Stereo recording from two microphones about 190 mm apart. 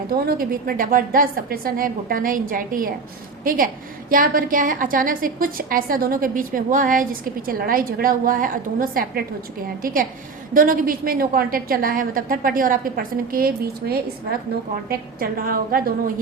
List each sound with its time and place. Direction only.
0.1 s a woman's voice: 50° right (ahead or behind)